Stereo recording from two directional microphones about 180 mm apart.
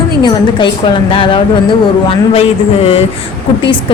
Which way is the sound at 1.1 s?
30° left (ahead or behind).